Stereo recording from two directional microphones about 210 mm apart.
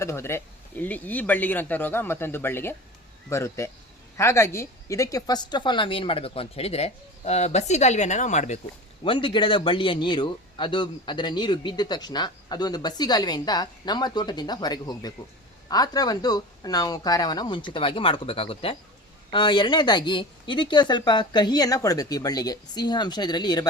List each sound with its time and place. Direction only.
0.0 s a man's voice: 10° left (ahead or behind); by 8.5 s 35° left (ahead or behind)
9.0 s a man's voice: 25° left (ahead or behind)